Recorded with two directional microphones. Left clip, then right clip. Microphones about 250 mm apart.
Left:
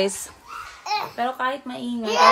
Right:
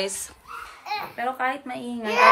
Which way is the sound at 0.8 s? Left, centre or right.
Left.